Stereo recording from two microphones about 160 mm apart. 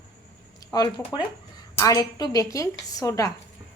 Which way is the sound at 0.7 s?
25° left (ahead or behind).